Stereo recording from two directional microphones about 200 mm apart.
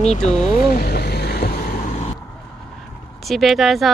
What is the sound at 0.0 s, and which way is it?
Vehicle, 35° left (ahead or behind).